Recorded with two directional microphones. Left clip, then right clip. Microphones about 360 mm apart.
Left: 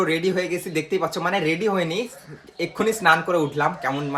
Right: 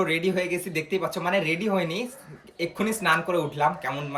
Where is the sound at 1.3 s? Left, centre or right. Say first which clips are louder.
Left 1 dB; centre.